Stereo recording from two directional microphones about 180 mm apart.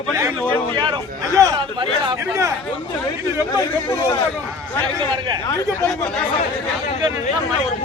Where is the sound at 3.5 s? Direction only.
20° left (ahead or behind).